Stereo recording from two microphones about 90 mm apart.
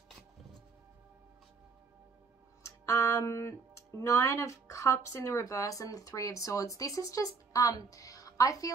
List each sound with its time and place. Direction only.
2.6 s speech: 35° left (ahead or behind)